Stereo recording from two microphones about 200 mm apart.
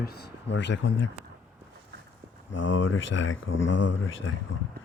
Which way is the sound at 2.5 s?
70° left (ahead or behind).